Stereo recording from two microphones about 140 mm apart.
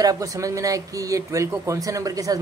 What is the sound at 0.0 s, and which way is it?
Speech, 25° right (ahead or behind).